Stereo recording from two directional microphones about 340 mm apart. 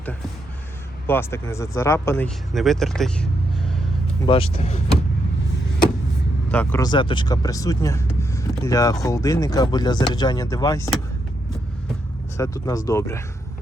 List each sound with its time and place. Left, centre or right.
1.0 s speech: centre
4.3 s speech: centre
6.5 s speech: centre
12.4 s speech: centre